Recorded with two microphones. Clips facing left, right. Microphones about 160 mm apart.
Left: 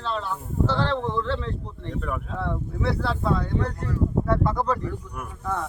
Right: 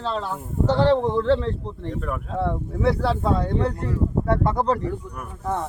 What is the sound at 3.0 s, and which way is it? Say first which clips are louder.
Speech: right 3 dB; 35° right (ahead or behind).